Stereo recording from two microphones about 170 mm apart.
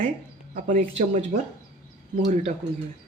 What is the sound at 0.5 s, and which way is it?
Speech, 45° right (ahead or behind).